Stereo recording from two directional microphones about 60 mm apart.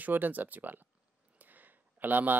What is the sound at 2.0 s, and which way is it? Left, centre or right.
Speech, right.